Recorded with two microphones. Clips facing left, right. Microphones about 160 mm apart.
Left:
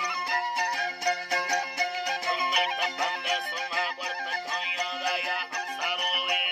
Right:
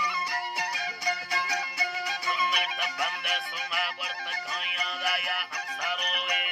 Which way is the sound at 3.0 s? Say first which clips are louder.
Left 3 dB; 25° left (ahead or behind).